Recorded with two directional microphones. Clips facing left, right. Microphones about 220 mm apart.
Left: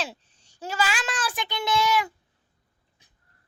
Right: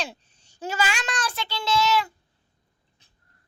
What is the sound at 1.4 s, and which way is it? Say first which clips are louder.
Speech: right 1 dB; 15° left (ahead or behind).